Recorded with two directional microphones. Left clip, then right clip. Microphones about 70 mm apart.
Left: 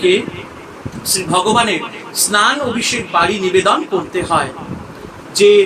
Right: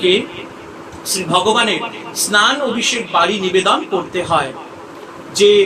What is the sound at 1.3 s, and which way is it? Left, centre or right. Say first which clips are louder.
A man's voice: even; left.